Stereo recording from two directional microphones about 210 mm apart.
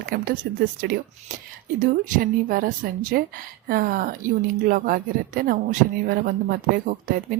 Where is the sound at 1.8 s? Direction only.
40° right (ahead or behind).